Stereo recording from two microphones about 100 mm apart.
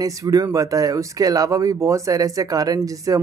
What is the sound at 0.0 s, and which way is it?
Speech, 35° right (ahead or behind).